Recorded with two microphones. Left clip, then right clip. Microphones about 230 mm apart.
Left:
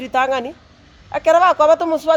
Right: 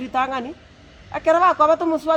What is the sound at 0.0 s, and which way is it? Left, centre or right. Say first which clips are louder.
Speech: left 5 dB; left.